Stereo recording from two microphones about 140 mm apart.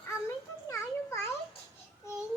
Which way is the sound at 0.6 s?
20° left (ahead or behind).